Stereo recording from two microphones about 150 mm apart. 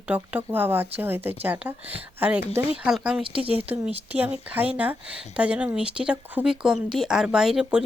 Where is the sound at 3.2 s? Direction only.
35° right (ahead or behind).